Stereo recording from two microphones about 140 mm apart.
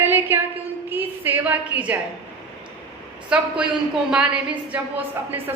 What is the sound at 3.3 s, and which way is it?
A woman's voice, 5° right (ahead or behind).